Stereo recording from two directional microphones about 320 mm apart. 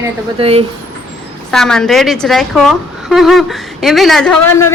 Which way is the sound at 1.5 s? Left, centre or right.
Centre.